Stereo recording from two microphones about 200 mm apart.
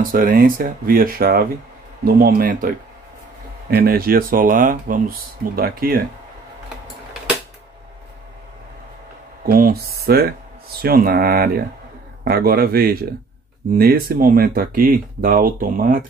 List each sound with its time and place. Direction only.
0.1 s speech: 45° right (ahead or behind)
3.7 s speech: 45° right (ahead or behind)
9.4 s speech: 45° right (ahead or behind)